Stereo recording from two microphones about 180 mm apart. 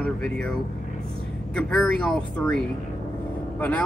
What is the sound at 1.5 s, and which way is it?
Speech, 5° left (ahead or behind).